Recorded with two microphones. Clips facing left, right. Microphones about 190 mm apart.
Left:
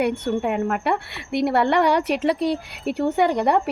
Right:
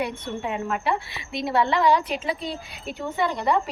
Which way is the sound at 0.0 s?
60° left (ahead or behind).